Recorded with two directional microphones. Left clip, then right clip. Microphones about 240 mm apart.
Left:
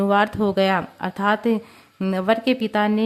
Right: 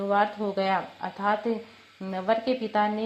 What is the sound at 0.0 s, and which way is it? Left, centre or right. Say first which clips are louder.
Speech: left 6 dB; left.